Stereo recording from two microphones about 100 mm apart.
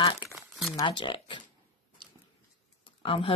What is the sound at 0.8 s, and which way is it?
Speech, 55° left (ahead or behind).